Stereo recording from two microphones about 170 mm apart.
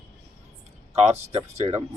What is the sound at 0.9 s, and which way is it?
Speech, 40° right (ahead or behind).